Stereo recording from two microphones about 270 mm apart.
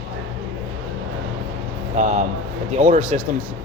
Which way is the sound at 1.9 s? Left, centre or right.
Right.